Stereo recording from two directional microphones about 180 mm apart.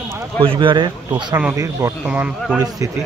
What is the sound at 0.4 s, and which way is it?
Speech, 25° right (ahead or behind).